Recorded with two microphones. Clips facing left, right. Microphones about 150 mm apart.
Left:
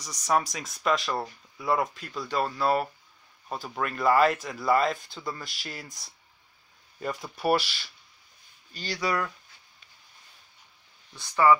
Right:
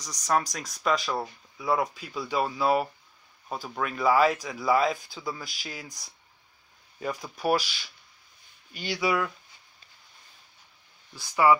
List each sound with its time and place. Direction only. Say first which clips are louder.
0.0 s speech: even; 5° left (ahead or behind)
8.7 s speech: right 2 dB; 20° right (ahead or behind)
9.0 s speech: right 2 dB; 5° right (ahead or behind)
11.1 s speech: even; 10° right (ahead or behind)